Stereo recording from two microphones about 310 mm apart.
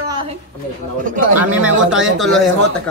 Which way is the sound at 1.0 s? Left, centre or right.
Right.